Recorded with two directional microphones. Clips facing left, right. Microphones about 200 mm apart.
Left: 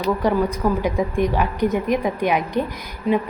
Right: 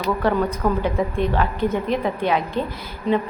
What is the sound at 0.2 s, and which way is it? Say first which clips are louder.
A woman's voice: left 1 dB; 15° left (ahead or behind).